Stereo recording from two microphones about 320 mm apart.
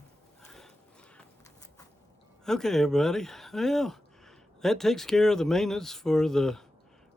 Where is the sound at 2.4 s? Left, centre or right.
Centre.